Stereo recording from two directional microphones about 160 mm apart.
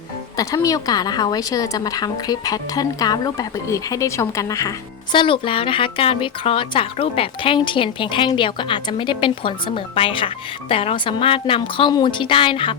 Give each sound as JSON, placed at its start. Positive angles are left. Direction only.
{"t": 0.3, "sound": "a woman's voice", "side_deg": 20}
{"t": 5.1, "sound": "speech", "side_deg": 30}